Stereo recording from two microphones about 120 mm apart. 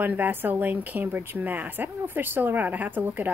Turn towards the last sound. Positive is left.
turn(degrees=-15)  # may be behind; listen again after turning